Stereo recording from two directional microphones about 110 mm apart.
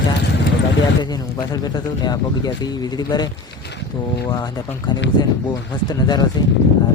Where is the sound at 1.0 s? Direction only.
40° left (ahead or behind).